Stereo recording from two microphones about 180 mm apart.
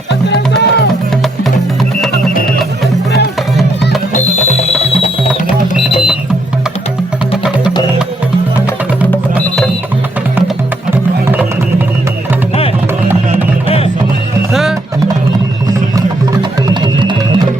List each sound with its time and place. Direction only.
0.3 s music: 70° left (ahead or behind)
4.1 s music: 40° left (ahead or behind)
10.9 s music: 10° right (ahead or behind)
13.7 s music: 35° left (ahead or behind)
14.5 s music: centre (ahead or behind)
16.8 s music: 25° right (ahead or behind)